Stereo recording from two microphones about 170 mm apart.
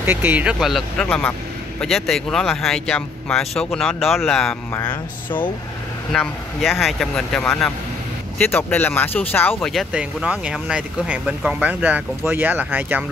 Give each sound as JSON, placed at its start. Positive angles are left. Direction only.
{"t": 0.0, "sound": "speech", "side_deg": -10}
{"t": 4.7, "sound": "speech", "side_deg": 25}
{"t": 6.1, "sound": "speech", "side_deg": 0}
{"t": 9.7, "sound": "speech", "side_deg": -5}